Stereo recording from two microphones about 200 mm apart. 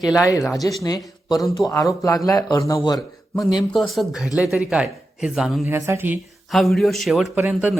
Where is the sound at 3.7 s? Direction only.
Centre (ahead or behind).